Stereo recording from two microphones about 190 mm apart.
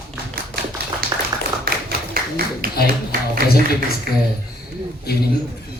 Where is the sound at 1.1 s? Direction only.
20° right (ahead or behind).